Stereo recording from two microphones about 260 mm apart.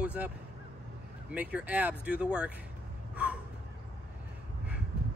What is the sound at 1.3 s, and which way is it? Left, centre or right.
Speech, centre.